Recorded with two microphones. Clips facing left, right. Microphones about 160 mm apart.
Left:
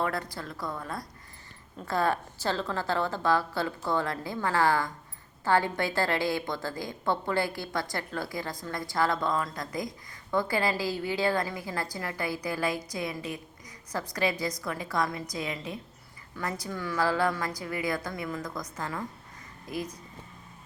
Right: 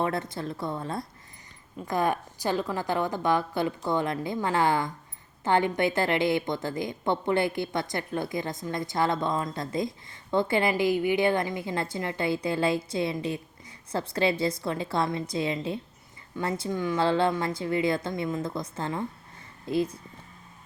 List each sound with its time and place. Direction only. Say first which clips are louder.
0.0 s a woman's voice: right 3 dB; 25° right (ahead or behind)